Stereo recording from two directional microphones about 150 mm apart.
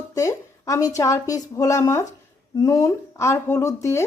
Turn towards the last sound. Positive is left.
turn(degrees=20)  # may be behind; listen again after turning